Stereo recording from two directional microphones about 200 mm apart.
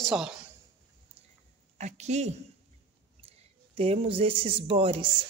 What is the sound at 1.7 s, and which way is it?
Speech, 35° right (ahead or behind).